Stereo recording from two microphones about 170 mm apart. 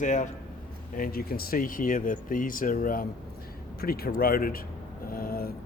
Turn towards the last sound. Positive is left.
turn(degrees=60)  # may be behind; listen again after turning